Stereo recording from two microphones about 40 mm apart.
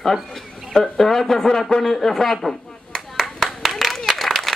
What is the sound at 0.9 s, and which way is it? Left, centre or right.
A man's voice, centre.